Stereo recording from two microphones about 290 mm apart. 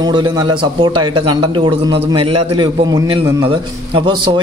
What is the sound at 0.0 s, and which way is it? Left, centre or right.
A man's voice, centre.